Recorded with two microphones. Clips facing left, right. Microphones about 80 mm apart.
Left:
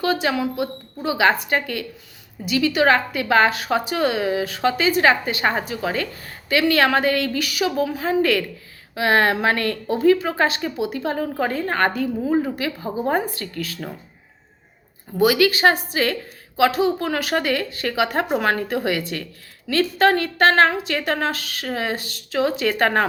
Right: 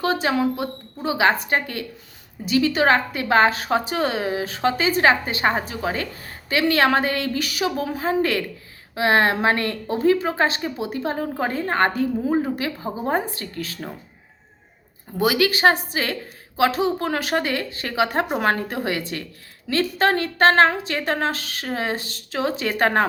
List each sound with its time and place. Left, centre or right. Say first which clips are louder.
0.0 s a woman's voice: even; right
15.2 s a woman's voice: left 2 dB; right